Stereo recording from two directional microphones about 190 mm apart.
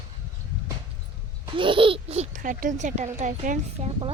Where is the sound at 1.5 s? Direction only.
25° right (ahead or behind).